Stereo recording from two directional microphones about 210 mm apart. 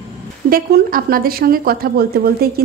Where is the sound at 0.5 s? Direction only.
45° right (ahead or behind).